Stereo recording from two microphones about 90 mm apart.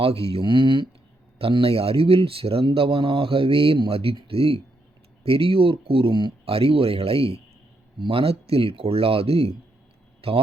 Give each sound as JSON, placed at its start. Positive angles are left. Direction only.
{"t": 0.0, "sound": "speech", "side_deg": -90}
{"t": 1.4, "sound": "speech", "side_deg": -90}
{"t": 7.9, "sound": "speech", "side_deg": -75}